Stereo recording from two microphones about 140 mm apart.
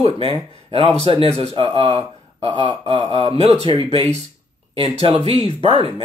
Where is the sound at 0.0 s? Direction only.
40° right (ahead or behind).